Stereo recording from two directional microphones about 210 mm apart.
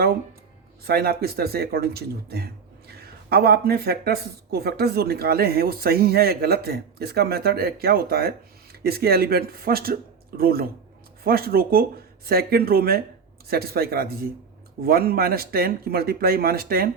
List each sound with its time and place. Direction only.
0.9 s speech: 50° right (ahead or behind)